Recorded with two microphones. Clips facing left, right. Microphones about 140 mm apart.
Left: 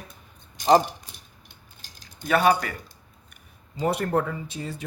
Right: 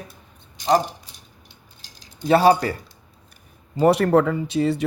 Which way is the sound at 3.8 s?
85° right.